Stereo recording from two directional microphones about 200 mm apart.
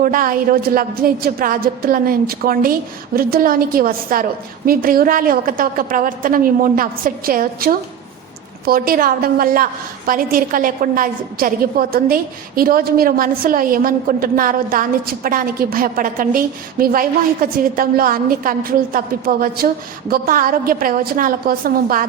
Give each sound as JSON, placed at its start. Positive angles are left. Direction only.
{"t": 0.0, "sound": "a woman's voice", "side_deg": -45}